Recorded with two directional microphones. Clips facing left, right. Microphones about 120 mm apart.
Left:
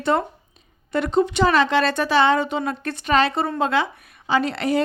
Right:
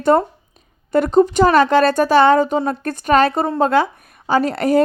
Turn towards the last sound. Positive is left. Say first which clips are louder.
# right 5 dB
turn(degrees=-45)  # may be behind; listen again after turning